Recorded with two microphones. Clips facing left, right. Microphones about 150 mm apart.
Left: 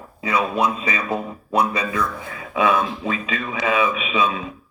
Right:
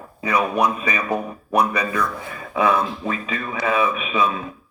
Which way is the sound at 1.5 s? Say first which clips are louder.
Right 1 dB; 25° left (ahead or behind).